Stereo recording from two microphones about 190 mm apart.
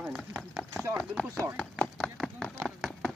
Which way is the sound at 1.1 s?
Centre (ahead or behind).